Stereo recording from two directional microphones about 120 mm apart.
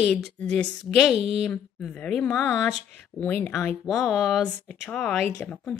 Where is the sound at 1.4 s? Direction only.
10° left (ahead or behind).